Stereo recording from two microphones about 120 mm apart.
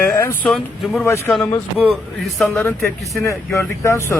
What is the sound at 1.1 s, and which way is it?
Speech, 25° left (ahead or behind).